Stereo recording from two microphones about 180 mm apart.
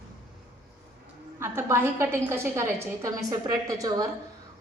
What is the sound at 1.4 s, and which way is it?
A woman's voice, 15° right (ahead or behind).